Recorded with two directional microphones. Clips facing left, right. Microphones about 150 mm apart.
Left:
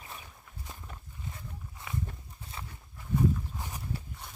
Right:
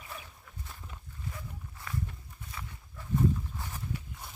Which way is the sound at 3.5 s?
15° left (ahead or behind).